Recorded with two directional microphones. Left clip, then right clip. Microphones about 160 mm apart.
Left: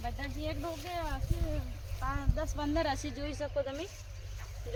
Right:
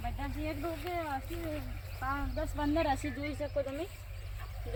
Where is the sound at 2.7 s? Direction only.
5° left (ahead or behind).